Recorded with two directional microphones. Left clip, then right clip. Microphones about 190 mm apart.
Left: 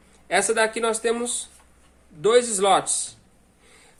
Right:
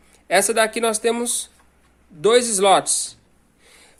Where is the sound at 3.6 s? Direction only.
50° right (ahead or behind).